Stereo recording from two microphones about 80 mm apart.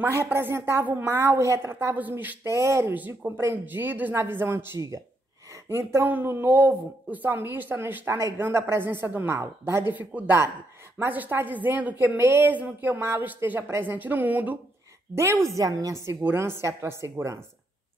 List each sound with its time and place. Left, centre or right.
0.1 s a woman's voice: right
2.0 s speech: right
2.5 s a woman's voice: right
2.9 s speech: right
4.7 s speech: right
5.5 s a woman's voice: right
9.9 s speech: right
15.1 s a woman's voice: right
15.9 s a woman's voice: right